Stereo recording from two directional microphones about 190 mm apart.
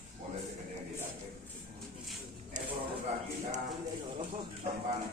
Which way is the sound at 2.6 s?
40° right (ahead or behind).